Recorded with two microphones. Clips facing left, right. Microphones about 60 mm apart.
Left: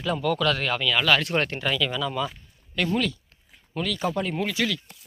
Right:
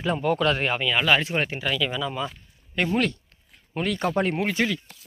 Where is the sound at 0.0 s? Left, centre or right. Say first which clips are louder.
Right 1 dB; right.